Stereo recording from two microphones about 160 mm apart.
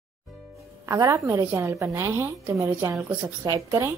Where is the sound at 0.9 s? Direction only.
20° right (ahead or behind).